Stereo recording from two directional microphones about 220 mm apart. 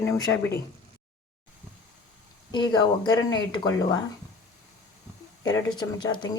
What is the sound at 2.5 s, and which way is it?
Speech, 20° left (ahead or behind).